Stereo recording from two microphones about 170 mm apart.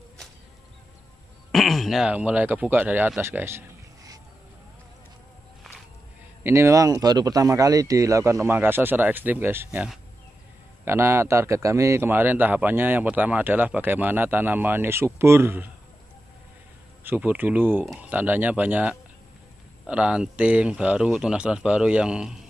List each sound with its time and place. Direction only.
1.5 s speech: centre (ahead or behind); by 4.2 s 20° right (ahead or behind)
6.4 s a man's voice: 15° right (ahead or behind)
17.0 s a man's voice: 10° right (ahead or behind)